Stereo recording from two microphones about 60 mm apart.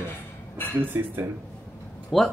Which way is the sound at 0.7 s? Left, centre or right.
Right.